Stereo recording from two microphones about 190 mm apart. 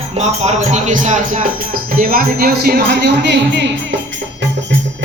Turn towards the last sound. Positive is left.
turn(degrees=-65)  # may be behind; listen again after turning